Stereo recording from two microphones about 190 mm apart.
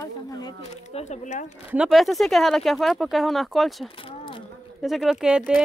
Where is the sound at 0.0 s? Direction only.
20° left (ahead or behind).